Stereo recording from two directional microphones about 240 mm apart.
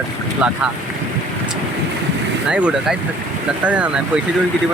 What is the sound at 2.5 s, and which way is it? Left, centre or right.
Speech, centre.